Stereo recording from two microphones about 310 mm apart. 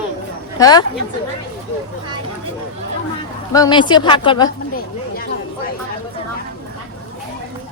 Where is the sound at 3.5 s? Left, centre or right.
Centre.